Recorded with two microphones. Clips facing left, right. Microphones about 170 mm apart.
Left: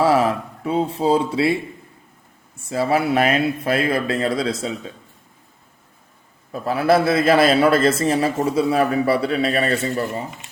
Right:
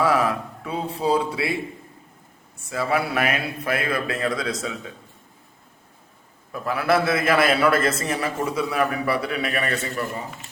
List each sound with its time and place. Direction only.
0.0 s speech: 30° left (ahead or behind)
2.6 s a man's voice: 30° left (ahead or behind)
6.5 s a man's voice: 25° left (ahead or behind)